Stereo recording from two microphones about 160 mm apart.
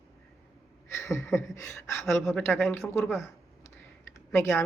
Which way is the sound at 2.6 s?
15° left (ahead or behind).